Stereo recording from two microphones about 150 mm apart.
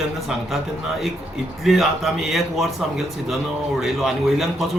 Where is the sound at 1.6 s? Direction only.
Centre (ahead or behind).